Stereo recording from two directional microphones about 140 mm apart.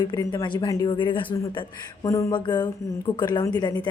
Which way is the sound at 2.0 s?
25° left (ahead or behind).